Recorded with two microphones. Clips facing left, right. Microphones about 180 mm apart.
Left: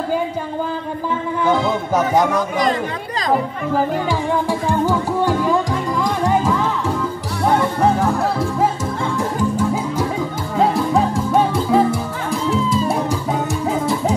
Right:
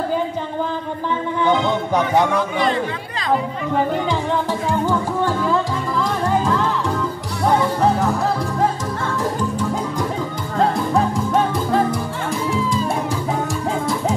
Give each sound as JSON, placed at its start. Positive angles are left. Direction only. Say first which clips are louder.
{"t": 1.4, "sound": "music", "louder": "even", "side_deg": 5}
{"t": 2.3, "sound": "a man's voice", "louder": "left 1 dB", "side_deg": 40}
{"t": 4.5, "sound": "music", "louder": "left 2 dB", "side_deg": 10}
{"t": 8.0, "sound": "music", "louder": "left 1 dB", "side_deg": 5}
{"t": 10.6, "sound": "music", "louder": "left 2 dB", "side_deg": 5}